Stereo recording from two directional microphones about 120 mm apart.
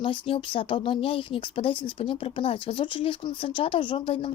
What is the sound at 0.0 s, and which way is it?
Speech, 45° left (ahead or behind).